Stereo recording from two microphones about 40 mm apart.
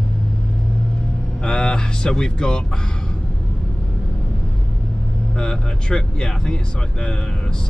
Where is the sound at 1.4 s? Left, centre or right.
Left.